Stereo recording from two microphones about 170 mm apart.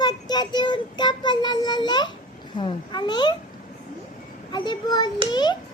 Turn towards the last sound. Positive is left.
turn(degrees=25)  # may be behind; listen again after turning